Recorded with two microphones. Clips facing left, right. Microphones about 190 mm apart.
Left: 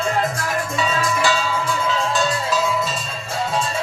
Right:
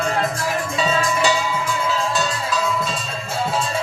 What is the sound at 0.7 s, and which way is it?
Music, 30° right (ahead or behind).